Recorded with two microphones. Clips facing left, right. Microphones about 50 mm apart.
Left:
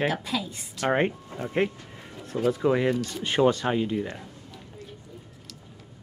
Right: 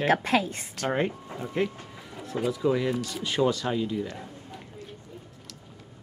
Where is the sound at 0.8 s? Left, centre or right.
Left.